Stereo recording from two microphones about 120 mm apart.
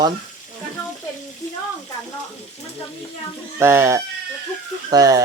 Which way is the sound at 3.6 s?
20° right (ahead or behind).